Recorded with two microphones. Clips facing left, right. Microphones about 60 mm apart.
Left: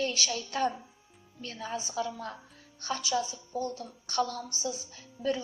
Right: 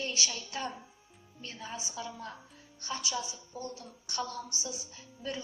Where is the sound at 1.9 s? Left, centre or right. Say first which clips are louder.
Left 6 dB; left.